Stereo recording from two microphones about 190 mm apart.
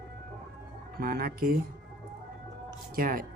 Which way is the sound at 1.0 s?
50° right (ahead or behind).